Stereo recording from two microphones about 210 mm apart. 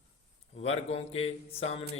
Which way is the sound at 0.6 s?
30° left (ahead or behind).